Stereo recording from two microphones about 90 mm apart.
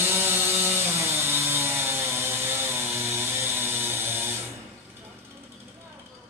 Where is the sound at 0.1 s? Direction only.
30° right (ahead or behind).